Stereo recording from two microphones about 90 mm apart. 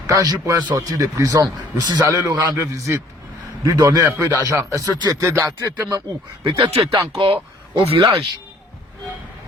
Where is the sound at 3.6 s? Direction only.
45° right (ahead or behind).